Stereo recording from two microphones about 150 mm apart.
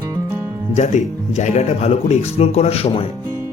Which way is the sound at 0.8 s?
50° left (ahead or behind).